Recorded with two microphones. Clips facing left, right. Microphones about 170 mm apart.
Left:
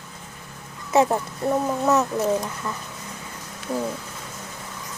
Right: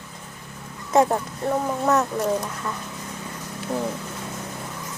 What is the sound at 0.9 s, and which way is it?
Speech, 5° left (ahead or behind).